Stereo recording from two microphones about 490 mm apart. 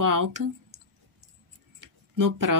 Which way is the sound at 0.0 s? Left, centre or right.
Right.